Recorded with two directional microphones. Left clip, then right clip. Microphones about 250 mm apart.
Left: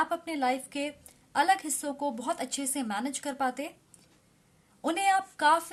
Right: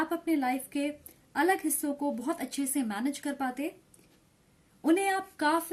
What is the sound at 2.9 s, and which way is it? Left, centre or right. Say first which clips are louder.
Speech: left 1 dB; left.